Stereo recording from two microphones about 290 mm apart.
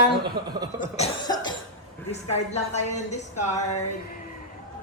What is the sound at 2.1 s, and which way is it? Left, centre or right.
A woman's voice, left.